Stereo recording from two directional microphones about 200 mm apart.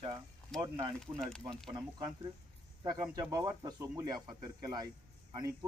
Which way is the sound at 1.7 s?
20° right (ahead or behind).